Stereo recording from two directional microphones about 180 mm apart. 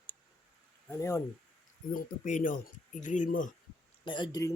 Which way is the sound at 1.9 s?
45° left (ahead or behind).